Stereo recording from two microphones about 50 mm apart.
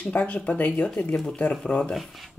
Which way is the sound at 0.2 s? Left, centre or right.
Left.